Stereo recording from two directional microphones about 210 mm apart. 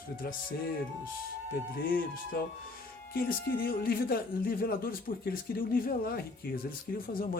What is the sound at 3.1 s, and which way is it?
Speech, 45° left (ahead or behind).